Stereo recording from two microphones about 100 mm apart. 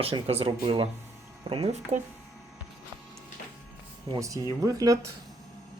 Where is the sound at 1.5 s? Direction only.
60° right (ahead or behind).